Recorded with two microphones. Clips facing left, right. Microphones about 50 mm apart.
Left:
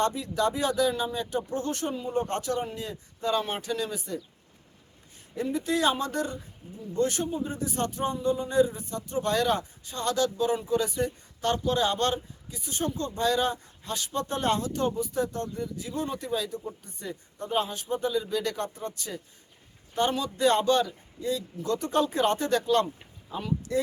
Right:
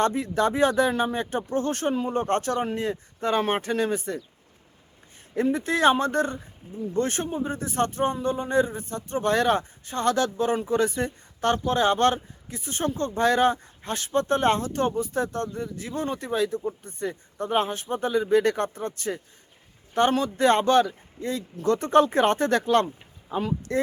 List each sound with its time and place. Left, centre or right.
0.0 s a man's voice: right
5.3 s a man's voice: right